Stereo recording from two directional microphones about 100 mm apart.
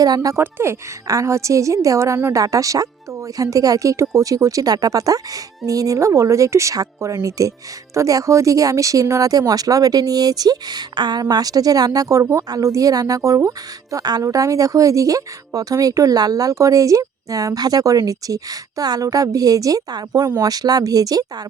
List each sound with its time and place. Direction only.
0.0 s a woman's voice: 40° right (ahead or behind)
0.3 s a woman's voice: 25° right (ahead or behind)